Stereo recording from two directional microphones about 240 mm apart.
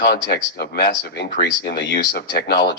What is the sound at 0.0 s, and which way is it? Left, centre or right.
Speech, left.